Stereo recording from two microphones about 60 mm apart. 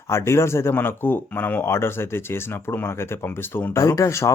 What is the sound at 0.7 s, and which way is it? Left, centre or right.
Speech, left.